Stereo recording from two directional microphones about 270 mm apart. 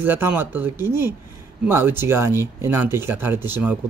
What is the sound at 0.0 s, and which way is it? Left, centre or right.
Speech, centre.